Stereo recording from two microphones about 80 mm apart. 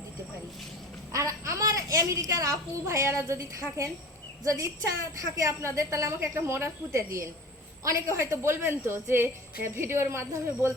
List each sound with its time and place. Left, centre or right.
1.1 s a child's voice: right
5.4 s a woman's voice: right